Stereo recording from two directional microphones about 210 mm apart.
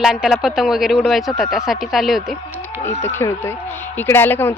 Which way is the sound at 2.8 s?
10° left (ahead or behind).